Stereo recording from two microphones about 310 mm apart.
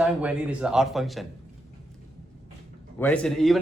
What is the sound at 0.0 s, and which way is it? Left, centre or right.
A man's voice, centre.